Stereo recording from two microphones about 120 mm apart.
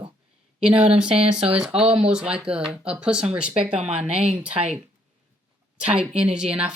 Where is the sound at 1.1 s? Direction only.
55° right (ahead or behind).